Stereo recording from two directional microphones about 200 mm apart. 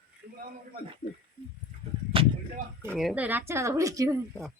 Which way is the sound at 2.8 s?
Centre (ahead or behind).